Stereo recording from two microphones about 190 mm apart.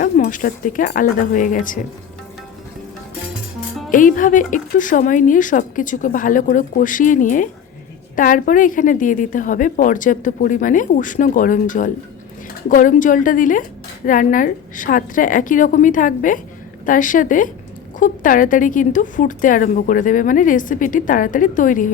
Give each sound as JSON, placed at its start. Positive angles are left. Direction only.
{"t": 0.0, "sound": "speech", "side_deg": 45}
{"t": 3.9, "sound": "speech", "side_deg": 45}